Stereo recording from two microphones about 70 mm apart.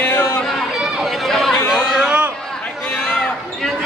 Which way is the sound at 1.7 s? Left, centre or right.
Centre.